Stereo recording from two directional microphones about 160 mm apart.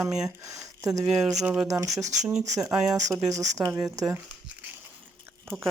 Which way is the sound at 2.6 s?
20° right (ahead or behind).